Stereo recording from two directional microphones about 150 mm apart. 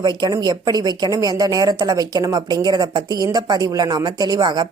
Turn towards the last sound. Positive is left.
turn(degrees=-30)  # may be behind; listen again after turning